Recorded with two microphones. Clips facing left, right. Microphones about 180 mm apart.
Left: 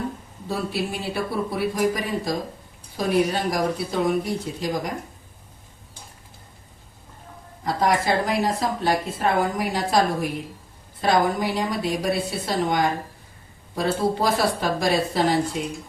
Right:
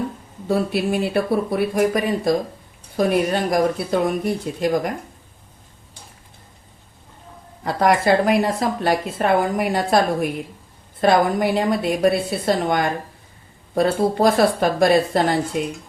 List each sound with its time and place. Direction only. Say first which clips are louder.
0.4 s speech: right 7 dB; 60° right (ahead or behind)
7.6 s speech: right 4 dB; 60° right (ahead or behind)
11.0 s speech: right 4 dB; 60° right (ahead or behind)